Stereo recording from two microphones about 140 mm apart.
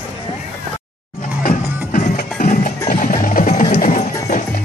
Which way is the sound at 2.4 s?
70° left (ahead or behind).